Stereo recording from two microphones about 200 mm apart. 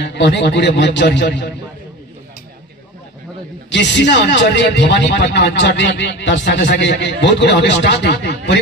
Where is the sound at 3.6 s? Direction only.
60° left (ahead or behind).